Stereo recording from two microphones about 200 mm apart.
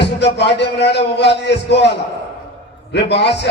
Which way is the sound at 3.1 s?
60° left (ahead or behind).